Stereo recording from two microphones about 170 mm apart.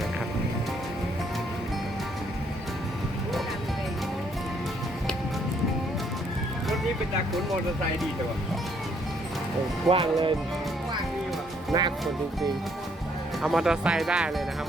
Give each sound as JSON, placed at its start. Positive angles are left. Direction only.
{"t": 9.9, "sound": "speech", "side_deg": -30}
{"t": 11.7, "sound": "speech", "side_deg": -25}
{"t": 13.4, "sound": "speech", "side_deg": 0}